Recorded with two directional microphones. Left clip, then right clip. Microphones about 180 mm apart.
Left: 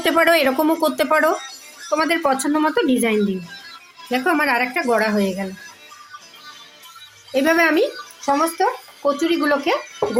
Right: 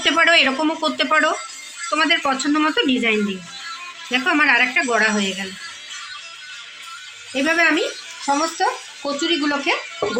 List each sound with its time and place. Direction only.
0.0 s a woman's voice: 65° left (ahead or behind)
7.3 s a woman's voice: 65° left (ahead or behind)